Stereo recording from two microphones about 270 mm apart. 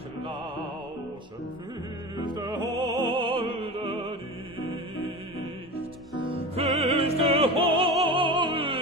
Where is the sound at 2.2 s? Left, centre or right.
Centre.